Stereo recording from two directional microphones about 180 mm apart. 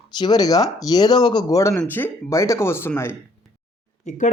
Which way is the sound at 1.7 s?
10° left (ahead or behind).